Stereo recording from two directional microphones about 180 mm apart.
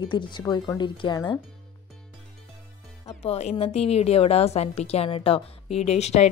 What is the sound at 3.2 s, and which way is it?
A woman's voice, 35° left (ahead or behind).